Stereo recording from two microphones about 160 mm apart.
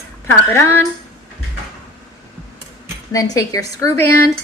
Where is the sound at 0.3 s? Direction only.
15° left (ahead or behind).